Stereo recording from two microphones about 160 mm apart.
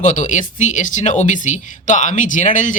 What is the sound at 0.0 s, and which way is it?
Speech, 50° left (ahead or behind).